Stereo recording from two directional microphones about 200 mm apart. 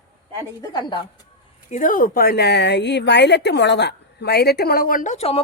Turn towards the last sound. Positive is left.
turn(degrees=30)  # may be behind; listen again after turning